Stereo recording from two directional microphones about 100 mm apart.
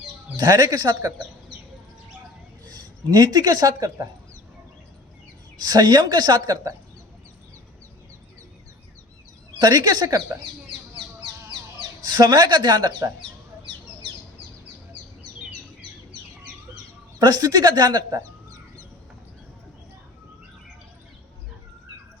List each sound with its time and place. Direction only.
0.3 s speech: 40° right (ahead or behind)
2.6 s speech: 40° right (ahead or behind)
5.5 s speech: 45° right (ahead or behind)
9.6 s speech: 45° right (ahead or behind)
11.8 s speech: 45° right (ahead or behind)
17.2 s speech: 40° right (ahead or behind)